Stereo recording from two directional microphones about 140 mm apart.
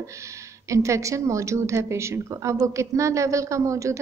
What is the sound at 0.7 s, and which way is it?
A woman's voice, 20° right (ahead or behind).